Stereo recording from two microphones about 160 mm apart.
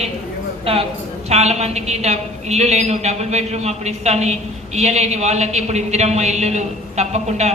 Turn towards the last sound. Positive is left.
turn(degrees=-45)  # may be behind; listen again after turning